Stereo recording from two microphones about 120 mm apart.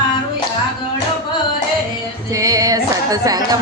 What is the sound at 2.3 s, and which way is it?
Music, 30° right (ahead or behind).